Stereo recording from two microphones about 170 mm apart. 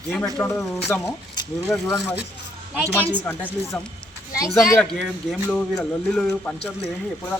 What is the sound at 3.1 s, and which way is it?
Speech, 10° left (ahead or behind).